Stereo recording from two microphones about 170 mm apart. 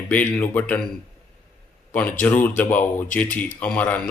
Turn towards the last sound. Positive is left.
turn(degrees=10)  # may be behind; listen again after turning